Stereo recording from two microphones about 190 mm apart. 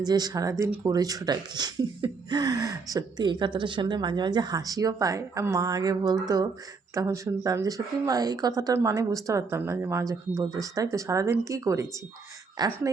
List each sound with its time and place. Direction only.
0.0 s a woman's voice: 20° right (ahead or behind)